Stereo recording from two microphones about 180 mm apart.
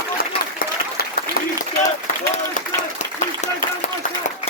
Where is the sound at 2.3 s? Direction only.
40° left (ahead or behind).